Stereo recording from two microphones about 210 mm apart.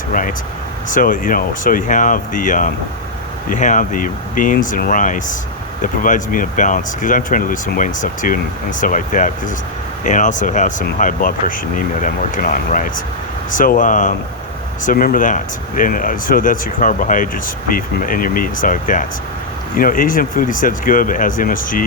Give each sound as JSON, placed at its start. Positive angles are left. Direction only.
{"t": 0.1, "sound": "speech", "side_deg": 40}